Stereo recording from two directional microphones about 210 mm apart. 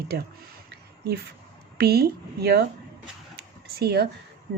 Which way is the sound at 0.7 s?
50° right (ahead or behind).